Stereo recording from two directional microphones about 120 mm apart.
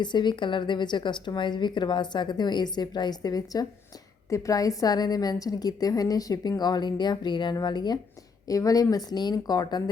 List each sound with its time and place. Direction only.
0.0 s a woman's voice: 40° left (ahead or behind)